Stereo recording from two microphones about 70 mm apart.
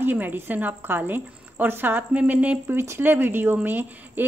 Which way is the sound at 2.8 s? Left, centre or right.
Right.